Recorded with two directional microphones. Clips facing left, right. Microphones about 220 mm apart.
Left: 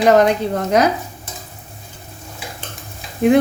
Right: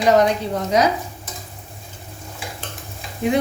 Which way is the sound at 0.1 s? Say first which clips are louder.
Left 1 dB; 55° left (ahead or behind).